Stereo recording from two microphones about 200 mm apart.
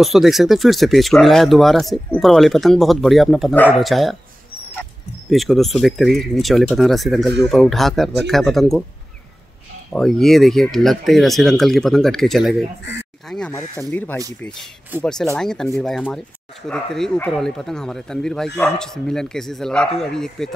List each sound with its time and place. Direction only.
0.0 s speech: centre (ahead or behind)
5.3 s speech: centre (ahead or behind)
9.9 s speech: centre (ahead or behind)
13.5 s speech: 15° left (ahead or behind)
14.9 s speech: 10° right (ahead or behind)
15.3 s speech: centre (ahead or behind)